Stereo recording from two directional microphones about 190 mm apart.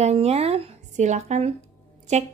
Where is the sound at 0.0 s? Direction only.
35° right (ahead or behind).